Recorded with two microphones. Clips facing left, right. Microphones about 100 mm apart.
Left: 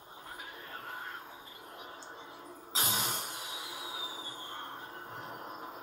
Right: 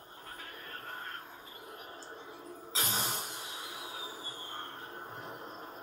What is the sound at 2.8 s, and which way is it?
Music, 5° left (ahead or behind).